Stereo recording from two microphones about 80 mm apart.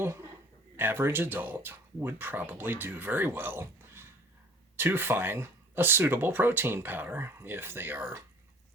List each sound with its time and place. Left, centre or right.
0.0 s speech: right